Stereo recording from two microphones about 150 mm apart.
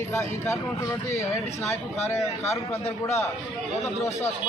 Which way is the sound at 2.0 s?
45° left (ahead or behind).